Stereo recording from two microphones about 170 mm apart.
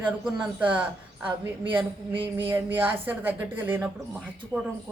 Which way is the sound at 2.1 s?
30° right (ahead or behind).